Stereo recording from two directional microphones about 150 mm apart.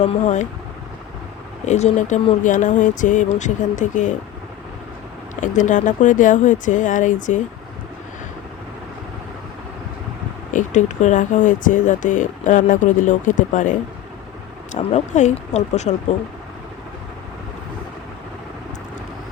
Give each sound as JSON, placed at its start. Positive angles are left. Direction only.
{"t": 0.0, "sound": "speech", "side_deg": 50}
{"t": 1.6, "sound": "speech", "side_deg": 50}
{"t": 5.4, "sound": "speech", "side_deg": 55}
{"t": 10.5, "sound": "speech", "side_deg": 55}